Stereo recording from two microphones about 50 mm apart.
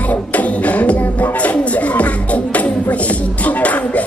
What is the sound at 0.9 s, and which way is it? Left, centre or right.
Music, left.